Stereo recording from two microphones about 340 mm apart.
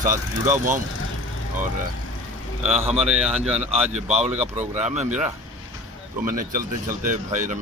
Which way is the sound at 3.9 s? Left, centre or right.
Centre.